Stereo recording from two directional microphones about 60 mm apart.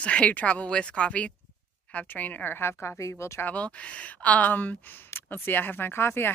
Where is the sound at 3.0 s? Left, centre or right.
Left.